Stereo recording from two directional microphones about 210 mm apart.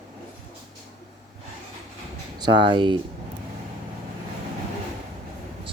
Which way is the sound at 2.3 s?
20° right (ahead or behind).